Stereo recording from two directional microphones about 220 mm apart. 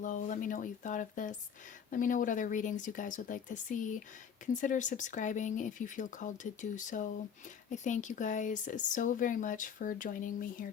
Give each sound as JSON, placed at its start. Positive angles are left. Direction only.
{"t": 0.0, "sound": "speech", "side_deg": 35}